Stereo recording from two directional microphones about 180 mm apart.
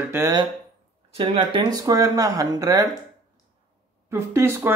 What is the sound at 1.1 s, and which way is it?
Speech, 30° right (ahead or behind).